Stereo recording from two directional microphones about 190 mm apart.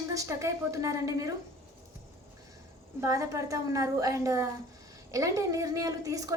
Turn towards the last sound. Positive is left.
turn(degrees=-20)  # may be behind; listen again after turning